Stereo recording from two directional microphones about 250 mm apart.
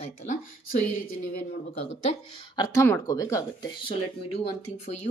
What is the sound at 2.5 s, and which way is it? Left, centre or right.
Speech, centre.